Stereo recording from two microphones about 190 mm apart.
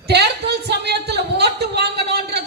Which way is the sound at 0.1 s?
60° right (ahead or behind).